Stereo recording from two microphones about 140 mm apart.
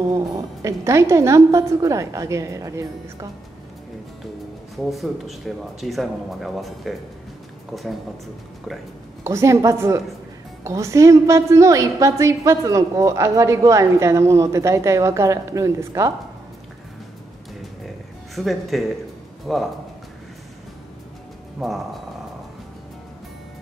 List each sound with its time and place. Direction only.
0.1 s a woman's voice: 25° right (ahead or behind)
4.9 s speech: centre (ahead or behind)
9.2 s a woman's voice: 20° right (ahead or behind)
18.3 s a man's voice: centre (ahead or behind)
21.5 s speech: centre (ahead or behind)